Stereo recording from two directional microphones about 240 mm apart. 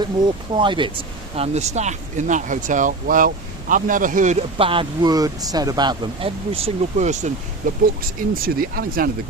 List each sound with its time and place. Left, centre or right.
0.5 s speech: centre; by 9.0 s right